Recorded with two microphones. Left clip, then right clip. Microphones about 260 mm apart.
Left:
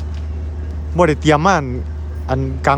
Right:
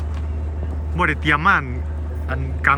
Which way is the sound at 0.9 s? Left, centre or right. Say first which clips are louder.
Left 5 dB; left.